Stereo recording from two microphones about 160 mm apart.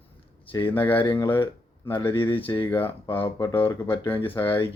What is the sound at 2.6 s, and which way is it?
Speech, 15° left (ahead or behind).